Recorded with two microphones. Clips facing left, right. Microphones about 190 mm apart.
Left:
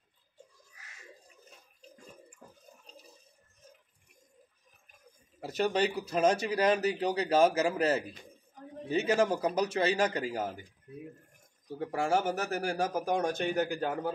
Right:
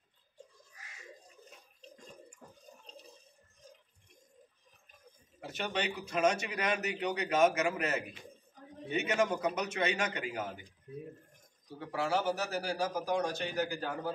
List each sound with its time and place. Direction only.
1.8 s water: 5° left (ahead or behind)
5.5 s a man's voice: 40° left (ahead or behind)
11.6 s a man's voice: 45° left (ahead or behind)